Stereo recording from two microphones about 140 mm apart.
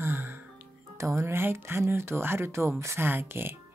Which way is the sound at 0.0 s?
15° right (ahead or behind).